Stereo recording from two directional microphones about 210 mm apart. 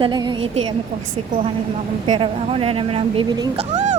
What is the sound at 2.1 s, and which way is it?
Speech, 25° right (ahead or behind).